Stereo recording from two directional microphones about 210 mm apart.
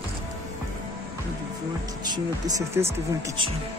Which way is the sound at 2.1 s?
15° right (ahead or behind).